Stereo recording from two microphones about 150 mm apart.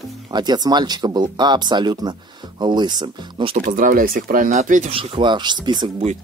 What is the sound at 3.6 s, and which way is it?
Speech, 60° right (ahead or behind).